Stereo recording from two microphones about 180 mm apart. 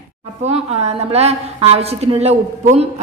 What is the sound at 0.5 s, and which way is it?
A woman's voice, 35° right (ahead or behind).